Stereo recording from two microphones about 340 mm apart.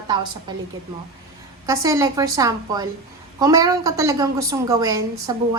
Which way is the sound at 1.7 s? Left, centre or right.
Centre.